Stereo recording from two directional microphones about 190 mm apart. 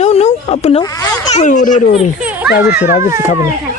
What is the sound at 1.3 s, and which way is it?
Speech, 40° left (ahead or behind).